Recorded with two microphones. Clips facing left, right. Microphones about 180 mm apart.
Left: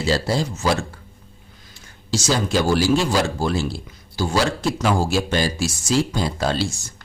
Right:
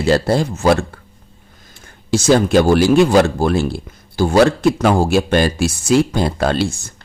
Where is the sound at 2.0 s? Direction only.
55° right (ahead or behind).